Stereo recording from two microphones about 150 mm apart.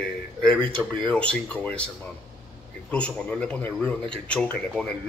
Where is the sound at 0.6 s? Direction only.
30° right (ahead or behind).